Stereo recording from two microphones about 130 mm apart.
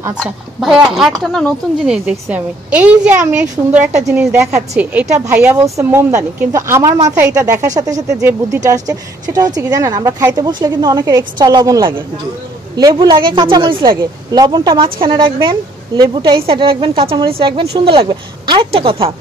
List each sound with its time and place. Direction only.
0.2 s speech: centre (ahead or behind)
2.2 s a woman's voice: 10° right (ahead or behind); by 13.8 s 40° right (ahead or behind)
13.8 s speech: 30° right (ahead or behind)